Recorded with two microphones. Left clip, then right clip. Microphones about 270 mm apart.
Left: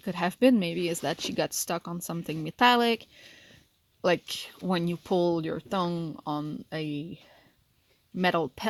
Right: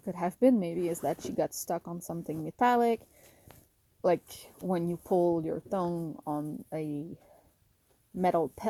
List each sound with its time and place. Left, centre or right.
0.0 s speech: left
4.0 s speech: left
8.3 s speech: left